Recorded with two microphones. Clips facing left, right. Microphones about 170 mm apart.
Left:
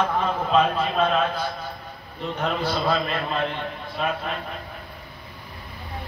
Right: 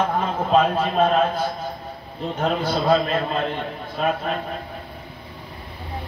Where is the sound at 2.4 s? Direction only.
40° right (ahead or behind).